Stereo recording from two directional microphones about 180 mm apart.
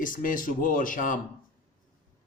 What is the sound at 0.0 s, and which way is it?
A man's voice, 50° left (ahead or behind).